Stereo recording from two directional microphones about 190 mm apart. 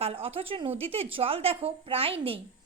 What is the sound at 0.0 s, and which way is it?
A woman's voice, 30° right (ahead or behind).